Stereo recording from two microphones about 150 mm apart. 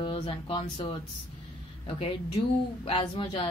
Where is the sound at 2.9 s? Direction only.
35° left (ahead or behind).